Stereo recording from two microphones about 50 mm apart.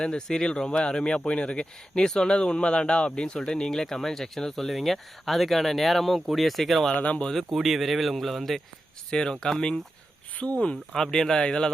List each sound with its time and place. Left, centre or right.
0.0 s speech: centre
7.0 s speech: left
7.5 s speech: centre
9.0 s speech: centre
10.3 s speech: left
10.9 s speech: centre